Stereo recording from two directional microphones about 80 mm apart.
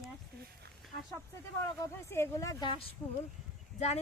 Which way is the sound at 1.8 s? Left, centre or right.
Left.